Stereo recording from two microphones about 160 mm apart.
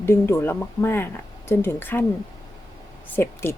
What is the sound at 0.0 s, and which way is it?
Speech, 15° left (ahead or behind).